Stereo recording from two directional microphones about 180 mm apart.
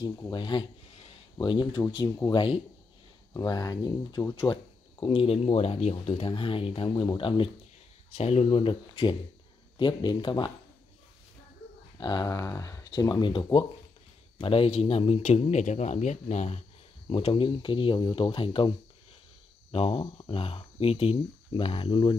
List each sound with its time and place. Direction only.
0.0 s speech: 25° left (ahead or behind)
12.0 s speech: 20° left (ahead or behind)
19.7 s speech: 30° left (ahead or behind)